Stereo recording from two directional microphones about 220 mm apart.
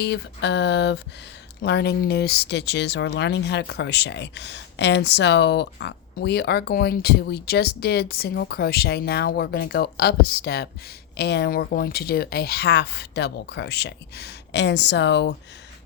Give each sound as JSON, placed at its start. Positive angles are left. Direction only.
{"t": 0.0, "sound": "speech", "side_deg": 50}